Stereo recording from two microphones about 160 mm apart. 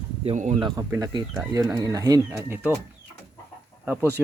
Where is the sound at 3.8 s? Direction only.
10° right (ahead or behind).